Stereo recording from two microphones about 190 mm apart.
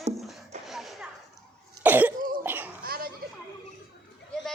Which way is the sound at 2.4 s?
10° right (ahead or behind).